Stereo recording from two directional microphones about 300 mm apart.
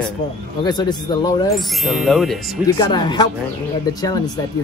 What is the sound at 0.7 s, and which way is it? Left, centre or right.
Wind chime, centre.